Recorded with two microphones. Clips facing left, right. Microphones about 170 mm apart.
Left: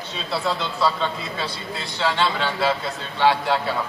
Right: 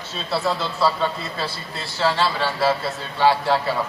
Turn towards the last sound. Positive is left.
turn(degrees=-5)  # may be behind; listen again after turning